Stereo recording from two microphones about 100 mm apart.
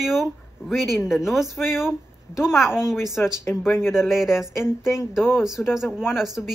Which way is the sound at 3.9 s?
5° right (ahead or behind).